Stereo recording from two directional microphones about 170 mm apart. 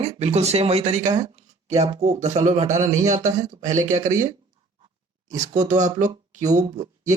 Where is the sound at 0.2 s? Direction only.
40° right (ahead or behind).